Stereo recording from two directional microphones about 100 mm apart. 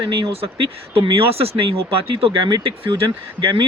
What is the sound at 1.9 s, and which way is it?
Speech, 65° right (ahead or behind).